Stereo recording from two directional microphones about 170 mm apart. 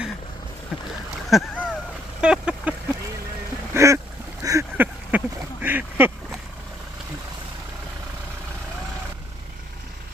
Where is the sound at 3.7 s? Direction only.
20° right (ahead or behind).